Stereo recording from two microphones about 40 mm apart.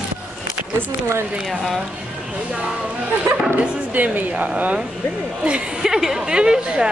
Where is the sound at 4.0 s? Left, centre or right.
Right.